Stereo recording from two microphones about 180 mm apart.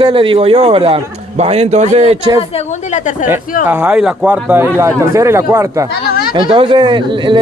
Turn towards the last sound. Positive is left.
turn(degrees=-25)  # may be behind; listen again after turning